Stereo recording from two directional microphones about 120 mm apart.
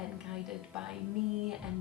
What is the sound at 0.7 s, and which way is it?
Speech, 5° right (ahead or behind).